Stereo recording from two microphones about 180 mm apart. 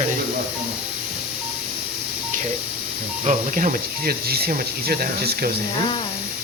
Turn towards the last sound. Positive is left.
turn(degrees=-55)  # may be behind; listen again after turning